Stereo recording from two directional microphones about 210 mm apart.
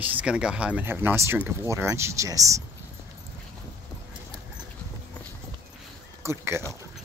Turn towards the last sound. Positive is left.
turn(degrees=-10)  # may be behind; listen again after turning